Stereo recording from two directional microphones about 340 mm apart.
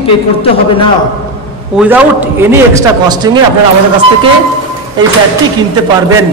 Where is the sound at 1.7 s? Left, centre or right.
Centre.